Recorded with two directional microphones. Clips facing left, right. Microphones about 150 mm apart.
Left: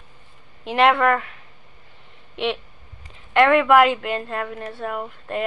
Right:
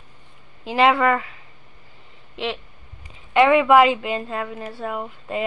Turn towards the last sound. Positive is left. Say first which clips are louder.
# even
turn(degrees=0)  # may be behind; listen again after turning